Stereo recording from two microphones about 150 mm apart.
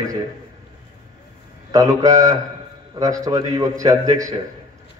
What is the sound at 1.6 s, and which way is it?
A man's voice, 20° right (ahead or behind).